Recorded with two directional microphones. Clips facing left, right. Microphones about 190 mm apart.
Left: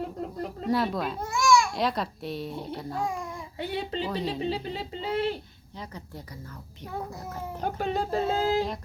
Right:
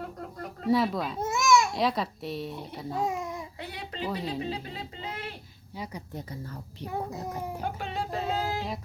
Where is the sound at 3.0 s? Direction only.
20° right (ahead or behind).